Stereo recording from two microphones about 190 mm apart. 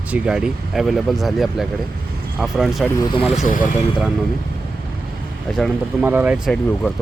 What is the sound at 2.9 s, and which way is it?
Speech, 20° left (ahead or behind).